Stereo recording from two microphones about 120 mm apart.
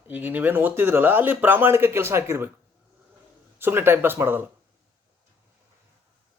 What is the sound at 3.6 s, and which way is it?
Speech, 20° right (ahead or behind).